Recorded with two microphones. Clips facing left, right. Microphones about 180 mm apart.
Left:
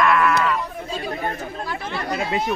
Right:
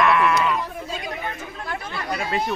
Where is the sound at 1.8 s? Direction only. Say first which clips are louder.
Left 4 dB; 25° left (ahead or behind).